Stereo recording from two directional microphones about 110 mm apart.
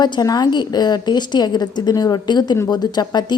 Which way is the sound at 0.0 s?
40° left (ahead or behind).